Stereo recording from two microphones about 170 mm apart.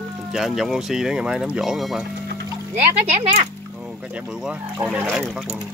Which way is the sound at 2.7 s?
40° right (ahead or behind).